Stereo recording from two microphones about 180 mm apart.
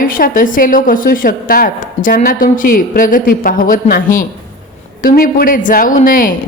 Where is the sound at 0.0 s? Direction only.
50° left (ahead or behind).